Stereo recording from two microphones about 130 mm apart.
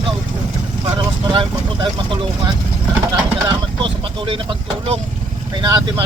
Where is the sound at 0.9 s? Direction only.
35° right (ahead or behind).